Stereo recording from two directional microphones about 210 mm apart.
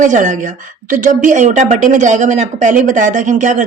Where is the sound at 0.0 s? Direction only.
35° right (ahead or behind).